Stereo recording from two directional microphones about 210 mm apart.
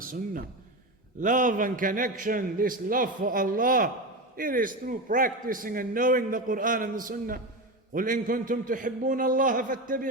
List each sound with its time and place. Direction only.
1.2 s a man's voice: 40° right (ahead or behind)